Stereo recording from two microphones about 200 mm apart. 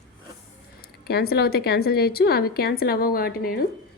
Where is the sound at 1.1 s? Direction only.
50° left (ahead or behind).